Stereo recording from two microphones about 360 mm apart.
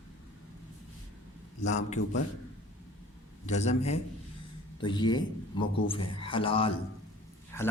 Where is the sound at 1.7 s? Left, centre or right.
Centre.